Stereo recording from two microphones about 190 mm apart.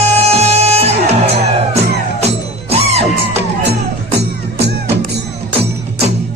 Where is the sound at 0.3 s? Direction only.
35° right (ahead or behind).